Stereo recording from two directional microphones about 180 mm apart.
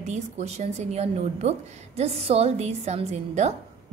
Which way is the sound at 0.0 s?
40° right (ahead or behind).